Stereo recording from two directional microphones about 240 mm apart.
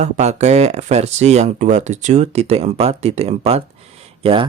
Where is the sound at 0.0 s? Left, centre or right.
Right.